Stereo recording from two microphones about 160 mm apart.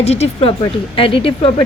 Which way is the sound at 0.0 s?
40° left (ahead or behind).